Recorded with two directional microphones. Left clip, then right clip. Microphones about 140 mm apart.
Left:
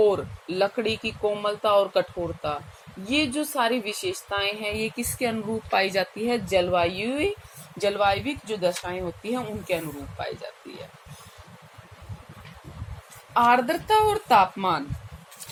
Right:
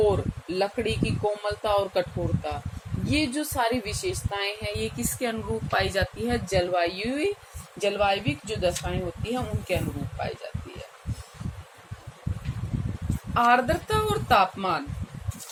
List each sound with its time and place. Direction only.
0.0 s speech: 25° left (ahead or behind)
7.8 s speech: 35° left (ahead or behind)
13.3 s speech: 35° left (ahead or behind)